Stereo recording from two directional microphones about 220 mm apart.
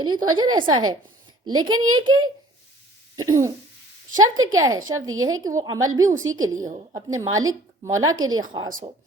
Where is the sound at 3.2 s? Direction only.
15° right (ahead or behind).